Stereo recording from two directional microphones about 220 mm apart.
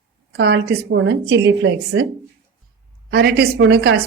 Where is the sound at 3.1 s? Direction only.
45° right (ahead or behind).